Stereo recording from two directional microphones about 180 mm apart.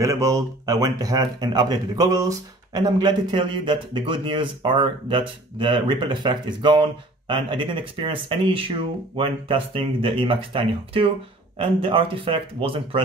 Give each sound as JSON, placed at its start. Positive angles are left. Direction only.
{"t": 0.0, "sound": "speech", "side_deg": -20}